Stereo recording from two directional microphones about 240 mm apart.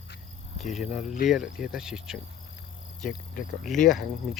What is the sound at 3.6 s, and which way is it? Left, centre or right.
Cricket, centre.